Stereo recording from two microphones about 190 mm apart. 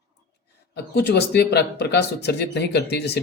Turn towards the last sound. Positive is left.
turn(degrees=60)  # may be behind; listen again after turning